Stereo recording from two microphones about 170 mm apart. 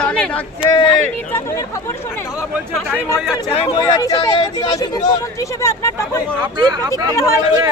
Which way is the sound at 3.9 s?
20° left (ahead or behind).